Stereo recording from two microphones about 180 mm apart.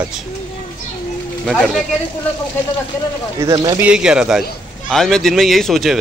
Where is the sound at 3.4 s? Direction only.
20° right (ahead or behind).